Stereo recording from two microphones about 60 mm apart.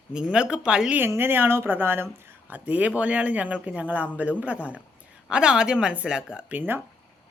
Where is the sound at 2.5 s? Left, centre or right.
Right.